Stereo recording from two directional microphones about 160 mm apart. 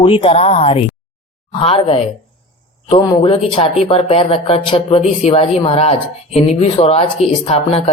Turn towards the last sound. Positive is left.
turn(degrees=40)  # may be behind; listen again after turning